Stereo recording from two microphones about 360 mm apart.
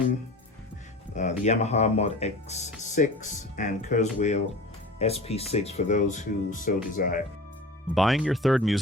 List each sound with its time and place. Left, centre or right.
1.1 s speech: centre
7.9 s speech: centre